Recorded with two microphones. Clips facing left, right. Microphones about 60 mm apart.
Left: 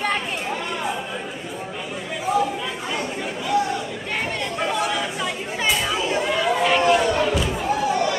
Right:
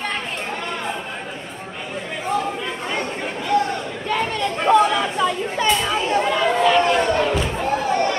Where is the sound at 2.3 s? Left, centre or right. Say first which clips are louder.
Left 2 dB; centre.